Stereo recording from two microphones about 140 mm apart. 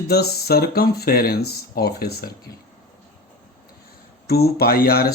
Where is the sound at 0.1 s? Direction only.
90° left.